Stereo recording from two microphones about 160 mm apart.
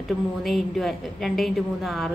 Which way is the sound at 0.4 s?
Centre (ahead or behind).